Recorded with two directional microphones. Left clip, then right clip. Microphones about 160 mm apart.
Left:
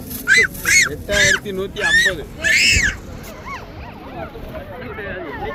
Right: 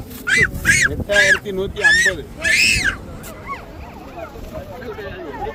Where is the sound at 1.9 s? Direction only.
90° right.